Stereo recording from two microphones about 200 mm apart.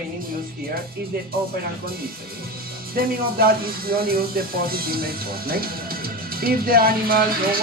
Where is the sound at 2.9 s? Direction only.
50° right (ahead or behind).